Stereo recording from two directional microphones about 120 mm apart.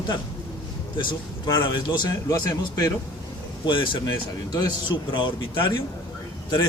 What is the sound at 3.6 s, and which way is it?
A man's voice, 40° left (ahead or behind).